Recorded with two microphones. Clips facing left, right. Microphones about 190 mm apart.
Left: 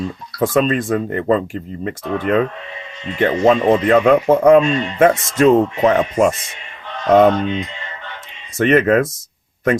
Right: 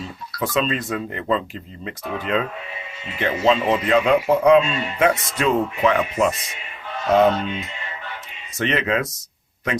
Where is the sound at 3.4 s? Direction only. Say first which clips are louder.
Left 5 dB; 50° left (ahead or behind).